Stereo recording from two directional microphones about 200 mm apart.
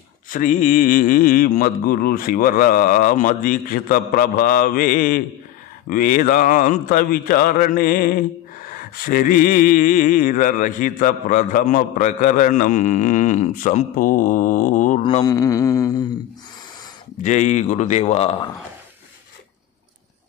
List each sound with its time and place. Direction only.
0.3 s speech: 40° left (ahead or behind)
15.2 s a sound: 20° left (ahead or behind)
17.2 s speech: 35° left (ahead or behind)